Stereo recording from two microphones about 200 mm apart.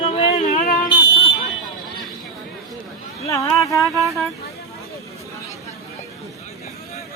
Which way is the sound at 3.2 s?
15° left (ahead or behind).